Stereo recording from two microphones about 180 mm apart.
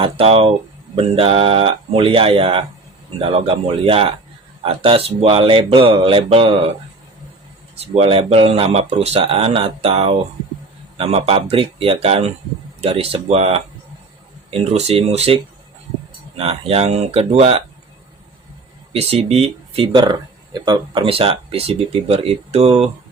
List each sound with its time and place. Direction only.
0.0 s speech: 30° right (ahead or behind)
7.9 s speech: 35° right (ahead or behind)
16.4 s speech: 35° right (ahead or behind)
18.9 s speech: 35° right (ahead or behind)